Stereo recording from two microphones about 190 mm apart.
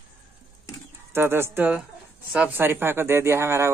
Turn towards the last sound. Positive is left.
turn(degrees=-15)  # may be behind; listen again after turning